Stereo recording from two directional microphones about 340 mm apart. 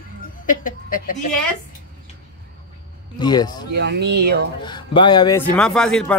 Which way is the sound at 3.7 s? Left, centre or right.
Right.